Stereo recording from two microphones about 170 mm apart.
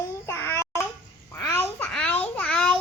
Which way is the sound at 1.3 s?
15° left (ahead or behind).